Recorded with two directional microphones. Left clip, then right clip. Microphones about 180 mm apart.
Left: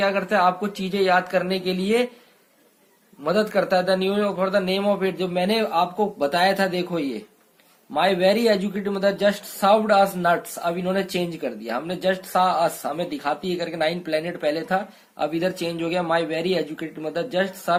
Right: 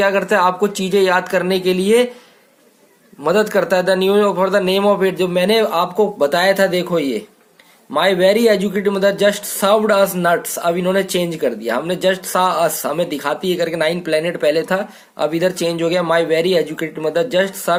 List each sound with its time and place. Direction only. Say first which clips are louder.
0.0 s speech: right 5 dB; 40° right (ahead or behind)
3.2 s speech: right 6 dB; 40° right (ahead or behind)